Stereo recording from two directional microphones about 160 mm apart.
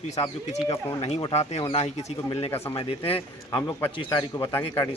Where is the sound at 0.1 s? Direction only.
45° left (ahead or behind); by 4.4 s 30° left (ahead or behind).